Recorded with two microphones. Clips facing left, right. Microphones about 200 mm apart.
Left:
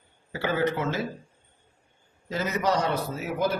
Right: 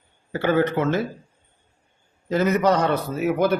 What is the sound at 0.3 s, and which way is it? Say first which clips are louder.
Speech: right 6 dB; 60° right (ahead or behind).